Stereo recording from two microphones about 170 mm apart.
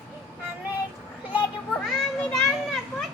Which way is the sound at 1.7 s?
Centre (ahead or behind).